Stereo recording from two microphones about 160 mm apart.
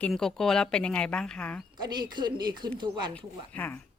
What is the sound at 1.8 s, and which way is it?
Speech, 25° right (ahead or behind).